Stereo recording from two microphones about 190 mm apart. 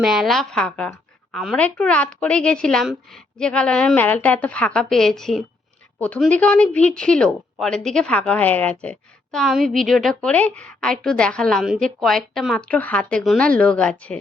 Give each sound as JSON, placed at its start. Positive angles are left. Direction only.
{"t": 0.0, "sound": "a woman's voice", "side_deg": 0}